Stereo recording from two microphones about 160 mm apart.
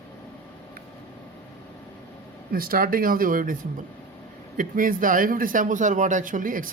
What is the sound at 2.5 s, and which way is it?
Speech, 65° right (ahead or behind).